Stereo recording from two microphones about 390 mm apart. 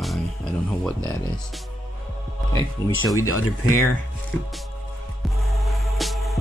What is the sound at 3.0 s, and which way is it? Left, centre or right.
Speech, left.